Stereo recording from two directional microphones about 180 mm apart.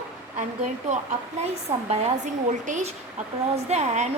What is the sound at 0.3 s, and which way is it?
A woman's voice, 40° right (ahead or behind).